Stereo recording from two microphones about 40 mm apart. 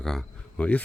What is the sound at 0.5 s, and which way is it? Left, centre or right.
Speech, left.